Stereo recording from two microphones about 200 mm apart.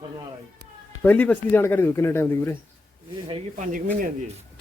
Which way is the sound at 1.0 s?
5° left (ahead or behind).